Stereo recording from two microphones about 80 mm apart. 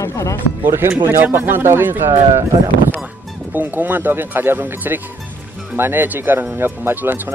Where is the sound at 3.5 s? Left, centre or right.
Right.